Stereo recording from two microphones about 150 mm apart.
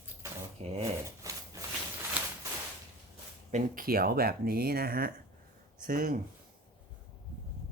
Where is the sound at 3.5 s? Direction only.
70° right (ahead or behind).